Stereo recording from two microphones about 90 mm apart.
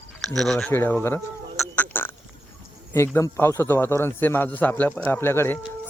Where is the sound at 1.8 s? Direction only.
25° left (ahead or behind).